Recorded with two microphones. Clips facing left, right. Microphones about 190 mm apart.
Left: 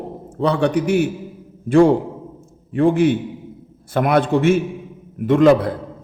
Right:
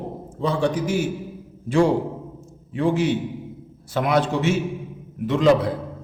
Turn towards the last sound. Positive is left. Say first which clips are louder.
# left 5 dB
turn(degrees=55)  # may be behind; listen again after turning